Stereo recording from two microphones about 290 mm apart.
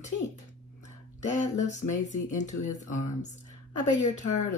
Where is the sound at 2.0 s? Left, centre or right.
Left.